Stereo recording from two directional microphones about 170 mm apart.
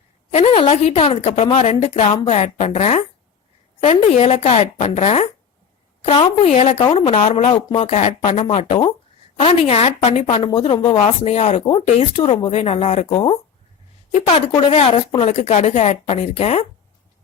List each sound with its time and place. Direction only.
0.3 s a woman's voice: 35° left (ahead or behind)
4.1 s a woman's voice: 40° left (ahead or behind)